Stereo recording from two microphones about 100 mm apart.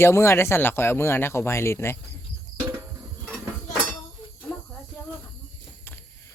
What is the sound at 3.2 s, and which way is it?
Cutlery, 5° right (ahead or behind).